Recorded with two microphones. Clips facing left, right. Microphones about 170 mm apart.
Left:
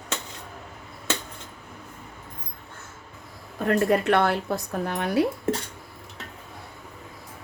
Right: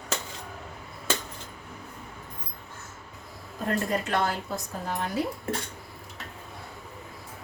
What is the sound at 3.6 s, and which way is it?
Speech, 60° left (ahead or behind).